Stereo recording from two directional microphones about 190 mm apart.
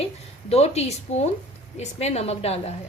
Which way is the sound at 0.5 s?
35° left (ahead or behind).